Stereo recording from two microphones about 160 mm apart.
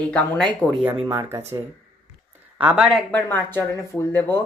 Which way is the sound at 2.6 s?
5° right (ahead or behind).